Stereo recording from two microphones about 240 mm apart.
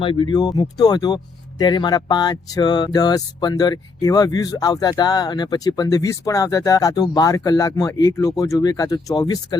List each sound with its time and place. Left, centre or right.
0.0 s speech: left